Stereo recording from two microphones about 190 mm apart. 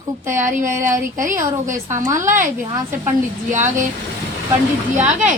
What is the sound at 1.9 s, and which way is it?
Speech, 15° right (ahead or behind).